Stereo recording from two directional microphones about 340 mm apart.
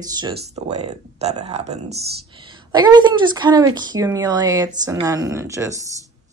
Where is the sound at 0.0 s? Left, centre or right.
Centre.